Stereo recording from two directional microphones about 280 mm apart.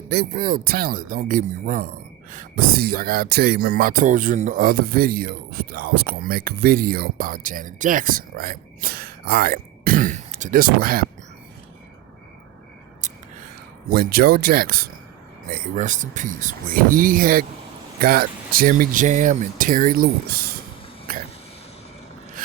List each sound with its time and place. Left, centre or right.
0.1 s speech: right
13.9 s speech: right